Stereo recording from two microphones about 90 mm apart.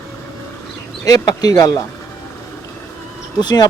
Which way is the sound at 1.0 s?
45° left (ahead or behind).